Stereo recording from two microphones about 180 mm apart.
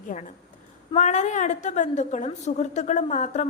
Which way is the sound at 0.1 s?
45° left (ahead or behind).